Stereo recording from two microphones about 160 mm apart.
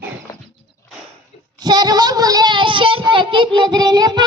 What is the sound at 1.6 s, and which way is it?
Speech, 25° right (ahead or behind).